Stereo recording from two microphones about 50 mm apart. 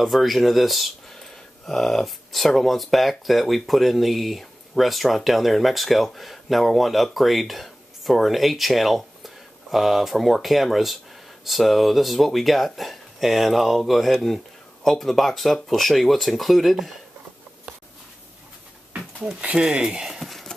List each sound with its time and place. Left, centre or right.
0.0 s speech: centre
19.6 s speech: centre
20.2 s a sound: centre